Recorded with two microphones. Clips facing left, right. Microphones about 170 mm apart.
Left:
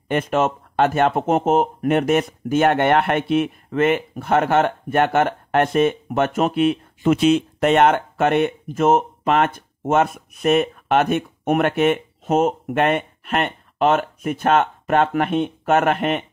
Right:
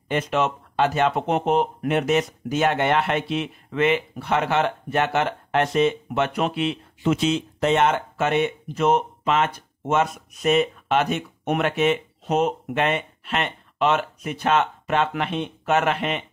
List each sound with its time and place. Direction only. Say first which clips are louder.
0.1 s speech: left 3 dB; 50° left (ahead or behind)